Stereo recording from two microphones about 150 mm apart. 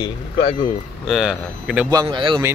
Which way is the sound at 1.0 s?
Centre (ahead or behind).